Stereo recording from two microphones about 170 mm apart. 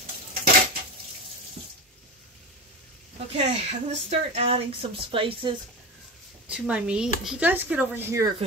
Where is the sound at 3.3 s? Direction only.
35° right (ahead or behind).